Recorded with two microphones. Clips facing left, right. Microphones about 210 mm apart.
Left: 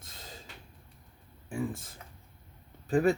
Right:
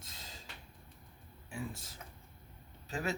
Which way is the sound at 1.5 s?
50° left (ahead or behind).